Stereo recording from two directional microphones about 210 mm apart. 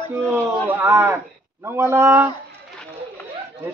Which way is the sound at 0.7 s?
10° right (ahead or behind).